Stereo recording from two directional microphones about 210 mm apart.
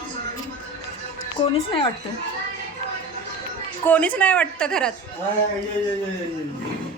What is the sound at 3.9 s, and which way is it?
Speech, 5° left (ahead or behind).